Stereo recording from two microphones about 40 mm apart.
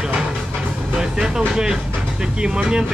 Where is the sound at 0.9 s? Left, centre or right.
Centre.